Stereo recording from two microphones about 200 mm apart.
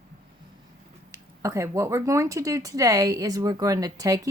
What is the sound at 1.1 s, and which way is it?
A woman's voice, 15° right (ahead or behind).